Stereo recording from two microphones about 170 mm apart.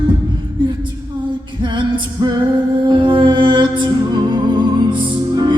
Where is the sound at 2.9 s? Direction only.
30° right (ahead or behind).